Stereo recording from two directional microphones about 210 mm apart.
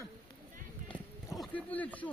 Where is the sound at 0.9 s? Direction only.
5° left (ahead or behind).